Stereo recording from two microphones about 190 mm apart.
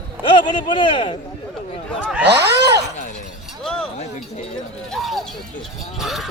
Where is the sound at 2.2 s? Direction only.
60° right (ahead or behind).